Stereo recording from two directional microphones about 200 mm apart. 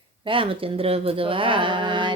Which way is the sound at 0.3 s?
25° right (ahead or behind).